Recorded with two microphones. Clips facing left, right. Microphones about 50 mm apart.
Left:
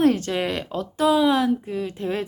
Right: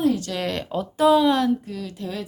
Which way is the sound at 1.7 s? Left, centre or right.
Left.